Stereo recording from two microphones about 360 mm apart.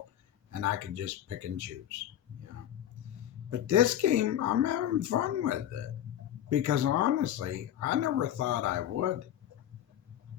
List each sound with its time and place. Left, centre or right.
0.5 s speech: right
3.5 s speech: right